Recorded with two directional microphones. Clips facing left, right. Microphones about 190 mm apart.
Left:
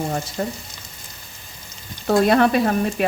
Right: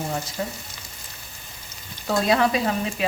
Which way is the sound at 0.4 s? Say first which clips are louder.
Left 5 dB; 50° left (ahead or behind).